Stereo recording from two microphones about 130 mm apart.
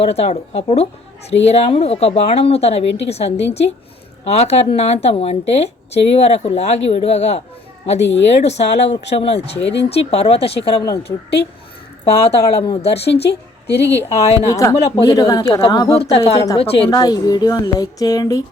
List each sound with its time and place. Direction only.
0.0 s speech: 55° left (ahead or behind)
12.0 s speech: 55° left (ahead or behind)
14.5 s speech: 25° left (ahead or behind)
16.0 s speech: 50° left (ahead or behind)
16.3 s speech: 30° left (ahead or behind)
16.6 s speech: 45° left (ahead or behind)
16.9 s speech: 30° left (ahead or behind)